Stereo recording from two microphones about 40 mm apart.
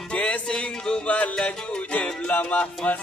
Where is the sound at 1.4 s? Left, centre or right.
Left.